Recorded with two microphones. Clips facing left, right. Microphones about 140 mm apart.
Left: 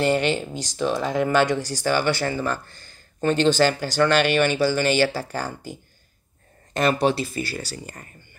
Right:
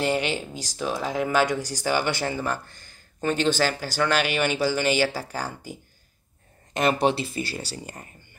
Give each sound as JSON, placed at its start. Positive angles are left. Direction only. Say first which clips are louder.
{"t": 0.0, "sound": "speech", "louder": "left 4 dB", "side_deg": -10}
{"t": 6.7, "sound": "speech", "louder": "left 1 dB", "side_deg": -15}